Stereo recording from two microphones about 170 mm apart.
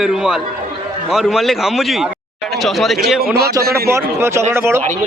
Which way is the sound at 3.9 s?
15° right (ahead or behind).